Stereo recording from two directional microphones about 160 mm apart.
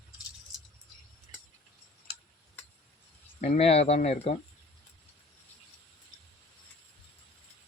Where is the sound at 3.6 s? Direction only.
40° left (ahead or behind).